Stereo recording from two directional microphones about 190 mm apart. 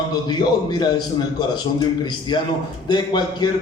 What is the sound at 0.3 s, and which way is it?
Speech, 20° left (ahead or behind).